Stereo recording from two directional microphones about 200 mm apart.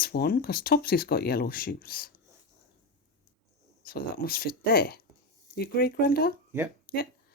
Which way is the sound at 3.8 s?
50° left (ahead or behind).